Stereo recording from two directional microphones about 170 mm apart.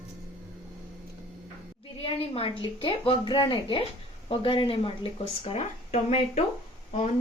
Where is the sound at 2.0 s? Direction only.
35° left (ahead or behind).